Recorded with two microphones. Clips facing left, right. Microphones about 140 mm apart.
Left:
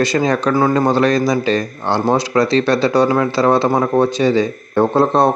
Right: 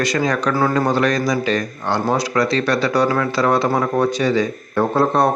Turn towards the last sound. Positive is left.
turn(degrees=25)  # may be behind; listen again after turning